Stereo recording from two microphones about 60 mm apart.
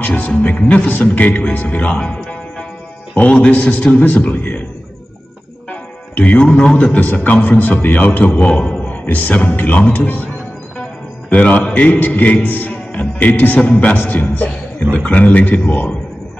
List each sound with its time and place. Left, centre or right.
0.0 s speech: left
5.7 s music: left
6.6 s a man's voice: centre
6.9 s speech: left
10.8 s music: left
11.7 s a man's voice: left
13.9 s a man's voice: left